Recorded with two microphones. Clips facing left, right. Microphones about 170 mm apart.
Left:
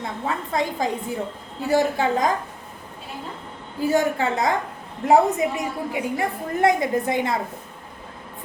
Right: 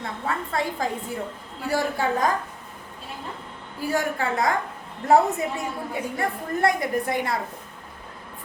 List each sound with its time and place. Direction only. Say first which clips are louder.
0.0 s a woman's voice: left 2 dB; 20° left (ahead or behind)
3.8 s a woman's voice: left 5 dB; 20° left (ahead or behind)